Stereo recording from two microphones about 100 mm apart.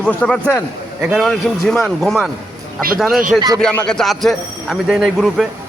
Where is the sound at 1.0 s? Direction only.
5° right (ahead or behind).